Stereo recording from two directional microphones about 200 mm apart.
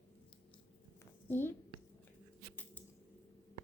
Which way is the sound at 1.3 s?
10° left (ahead or behind).